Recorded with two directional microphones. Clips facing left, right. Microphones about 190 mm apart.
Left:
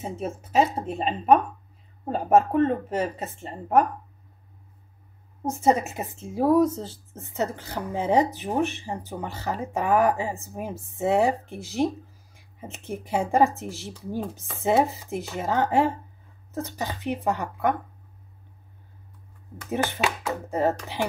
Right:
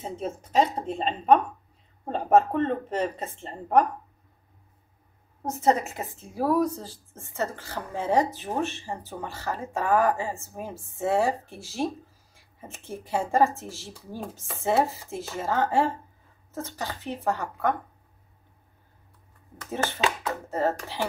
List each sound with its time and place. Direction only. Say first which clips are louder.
0.0 s speech: left 1 dB; 10° left (ahead or behind)
5.8 s speech: left 2 dB; 20° left (ahead or behind)
19.7 s speech: left 1 dB; 15° left (ahead or behind)